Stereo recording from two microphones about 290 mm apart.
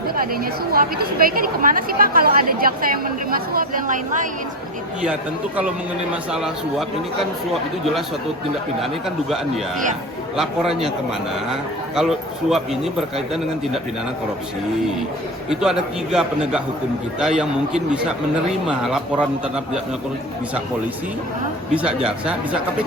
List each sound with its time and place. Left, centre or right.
0.7 s speech: right
6.3 s speech: centre
8.8 s speech: centre
11.9 s speech: centre
15.4 s speech: centre
21.8 s speech: centre